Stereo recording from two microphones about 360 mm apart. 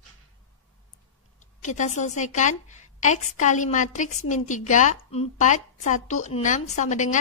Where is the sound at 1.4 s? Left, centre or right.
Centre.